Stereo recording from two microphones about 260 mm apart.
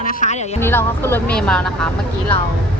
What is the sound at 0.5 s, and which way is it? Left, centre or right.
Speech, centre.